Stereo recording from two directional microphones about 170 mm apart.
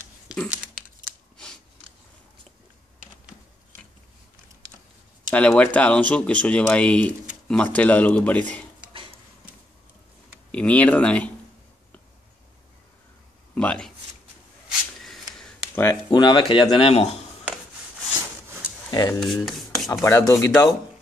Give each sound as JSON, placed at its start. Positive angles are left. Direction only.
{"t": 5.3, "sound": "speech", "side_deg": 10}
{"t": 10.5, "sound": "speech", "side_deg": 10}
{"t": 13.6, "sound": "a sound", "side_deg": 5}
{"t": 15.0, "sound": "a sound", "side_deg": 0}
{"t": 15.7, "sound": "a sound", "side_deg": 15}
{"t": 16.1, "sound": "speech", "side_deg": 25}
{"t": 18.9, "sound": "speech", "side_deg": 20}
{"t": 19.1, "sound": "speech", "side_deg": 0}
{"t": 19.9, "sound": "speech", "side_deg": 15}